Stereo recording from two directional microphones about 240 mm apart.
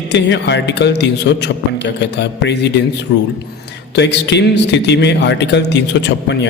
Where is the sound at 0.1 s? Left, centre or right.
Left.